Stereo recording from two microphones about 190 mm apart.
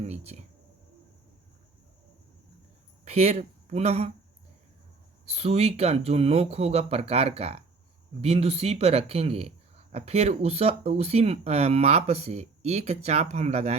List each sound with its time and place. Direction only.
0.0 s a sound: 35° right (ahead or behind)
3.0 s speech: 35° right (ahead or behind)
5.2 s speech: 35° right (ahead or behind)